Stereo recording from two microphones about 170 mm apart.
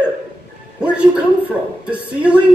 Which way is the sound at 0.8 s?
5° right (ahead or behind).